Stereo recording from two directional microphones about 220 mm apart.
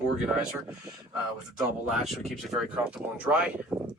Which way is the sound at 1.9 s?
Centre (ahead or behind).